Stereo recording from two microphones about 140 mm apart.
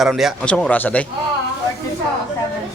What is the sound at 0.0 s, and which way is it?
Speech, centre (ahead or behind).